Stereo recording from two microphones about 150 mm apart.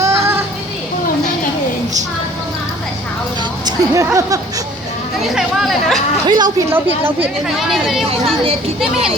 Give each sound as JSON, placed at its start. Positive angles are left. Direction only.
{"t": 0.0, "sound": "children playing", "side_deg": -15}
{"t": 3.7, "sound": "speech", "side_deg": -20}
{"t": 5.3, "sound": "speech", "side_deg": -5}
{"t": 6.2, "sound": "speech", "side_deg": -30}
{"t": 6.7, "sound": "speech", "side_deg": -15}